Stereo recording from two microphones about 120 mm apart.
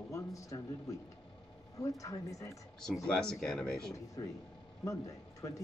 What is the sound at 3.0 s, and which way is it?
Speech, 5° left (ahead or behind).